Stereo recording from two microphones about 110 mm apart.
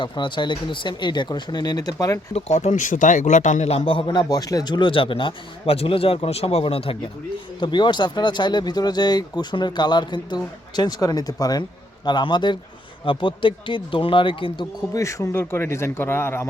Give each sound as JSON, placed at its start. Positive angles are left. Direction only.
{"t": 0.0, "sound": "speech", "side_deg": 45}
{"t": 2.3, "sound": "a man's voice", "side_deg": 85}
{"t": 7.6, "sound": "speech", "side_deg": 45}
{"t": 14.8, "sound": "speech", "side_deg": 30}